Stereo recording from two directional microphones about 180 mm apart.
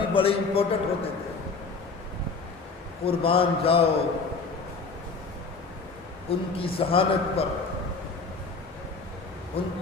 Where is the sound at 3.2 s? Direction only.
30° left (ahead or behind).